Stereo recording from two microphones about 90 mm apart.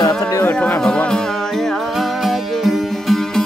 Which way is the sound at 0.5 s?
15° left (ahead or behind).